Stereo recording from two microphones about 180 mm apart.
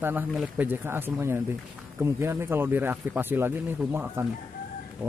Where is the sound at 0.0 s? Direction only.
10° right (ahead or behind).